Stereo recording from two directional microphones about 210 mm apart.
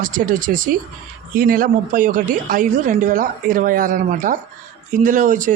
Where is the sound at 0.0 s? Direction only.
40° right (ahead or behind).